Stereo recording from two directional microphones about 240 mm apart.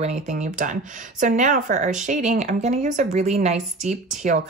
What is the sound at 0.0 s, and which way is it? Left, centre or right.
Speech, right.